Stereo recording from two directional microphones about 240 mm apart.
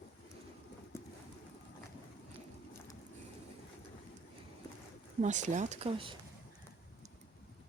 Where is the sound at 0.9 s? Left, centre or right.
Centre.